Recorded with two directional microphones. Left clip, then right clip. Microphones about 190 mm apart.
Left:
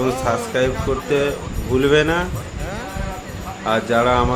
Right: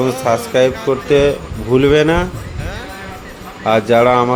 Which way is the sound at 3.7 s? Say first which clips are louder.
Right 6 dB; 35° right (ahead or behind).